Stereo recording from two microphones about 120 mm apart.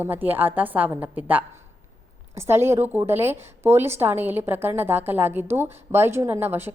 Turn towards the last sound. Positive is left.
turn(degrees=-20)  # may be behind; listen again after turning